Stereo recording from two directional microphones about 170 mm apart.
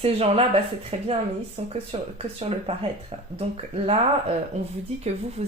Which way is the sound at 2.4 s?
35° right (ahead or behind).